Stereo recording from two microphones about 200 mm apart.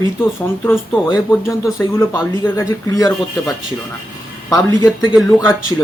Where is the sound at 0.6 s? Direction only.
10° left (ahead or behind).